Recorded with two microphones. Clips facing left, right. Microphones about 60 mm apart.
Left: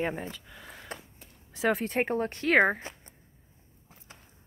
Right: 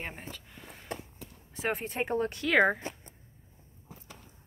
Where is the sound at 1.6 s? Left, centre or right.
Left.